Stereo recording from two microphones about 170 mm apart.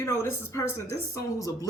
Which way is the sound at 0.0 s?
15° left (ahead or behind).